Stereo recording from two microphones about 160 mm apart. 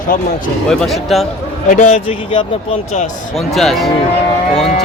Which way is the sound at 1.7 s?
40° left (ahead or behind).